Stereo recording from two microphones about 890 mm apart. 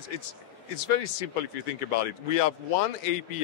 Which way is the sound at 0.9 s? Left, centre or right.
Left.